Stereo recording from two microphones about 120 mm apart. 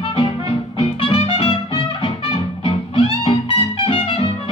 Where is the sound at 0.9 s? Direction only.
50° left (ahead or behind).